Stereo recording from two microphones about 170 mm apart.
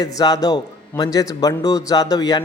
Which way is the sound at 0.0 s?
20° left (ahead or behind).